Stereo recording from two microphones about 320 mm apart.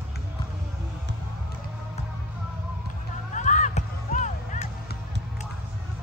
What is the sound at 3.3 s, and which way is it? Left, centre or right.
Music, left.